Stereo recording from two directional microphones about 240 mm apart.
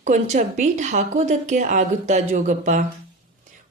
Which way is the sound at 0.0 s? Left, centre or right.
Right.